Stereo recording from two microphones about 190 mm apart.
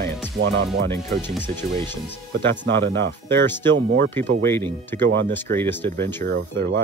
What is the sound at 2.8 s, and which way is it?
Speech, 65° right (ahead or behind).